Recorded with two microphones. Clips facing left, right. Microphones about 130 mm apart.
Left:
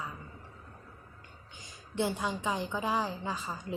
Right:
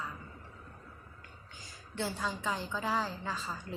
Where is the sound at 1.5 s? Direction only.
20° left (ahead or behind).